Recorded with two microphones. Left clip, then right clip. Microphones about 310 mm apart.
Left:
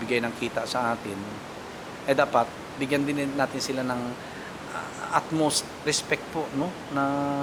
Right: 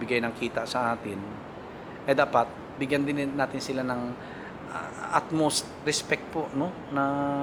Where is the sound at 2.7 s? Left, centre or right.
Centre.